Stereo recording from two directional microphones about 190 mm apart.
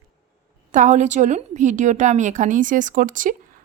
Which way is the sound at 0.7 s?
40° right (ahead or behind).